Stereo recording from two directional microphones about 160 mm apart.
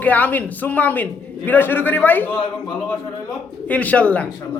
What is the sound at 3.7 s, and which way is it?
Speech, 10° left (ahead or behind).